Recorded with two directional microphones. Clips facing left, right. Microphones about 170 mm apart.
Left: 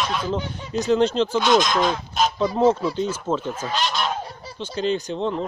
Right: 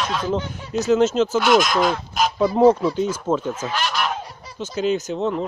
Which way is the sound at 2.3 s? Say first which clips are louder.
Right 5 dB; 10° right (ahead or behind).